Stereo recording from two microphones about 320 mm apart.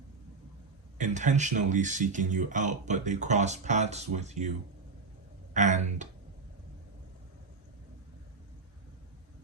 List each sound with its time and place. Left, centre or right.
0.9 s speech: right
5.5 s speech: right